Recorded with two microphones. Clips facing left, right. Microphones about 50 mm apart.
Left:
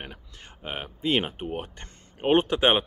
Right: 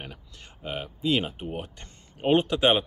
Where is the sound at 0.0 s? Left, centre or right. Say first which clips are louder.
Left 1 dB; left.